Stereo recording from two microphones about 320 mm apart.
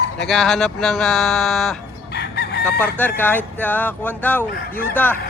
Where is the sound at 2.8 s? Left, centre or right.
Centre.